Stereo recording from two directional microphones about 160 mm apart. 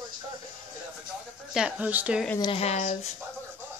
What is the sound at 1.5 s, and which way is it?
Speech, 5° right (ahead or behind).